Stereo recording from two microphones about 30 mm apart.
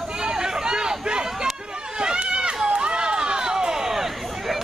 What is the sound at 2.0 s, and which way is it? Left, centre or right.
Run, right.